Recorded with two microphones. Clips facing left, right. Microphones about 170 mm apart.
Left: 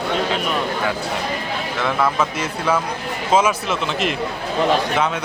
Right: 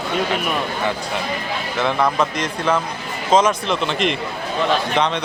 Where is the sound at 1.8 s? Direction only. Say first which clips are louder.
Right 1 dB; 5° left (ahead or behind).